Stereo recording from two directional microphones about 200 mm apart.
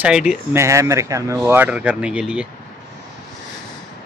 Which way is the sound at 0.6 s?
15° right (ahead or behind).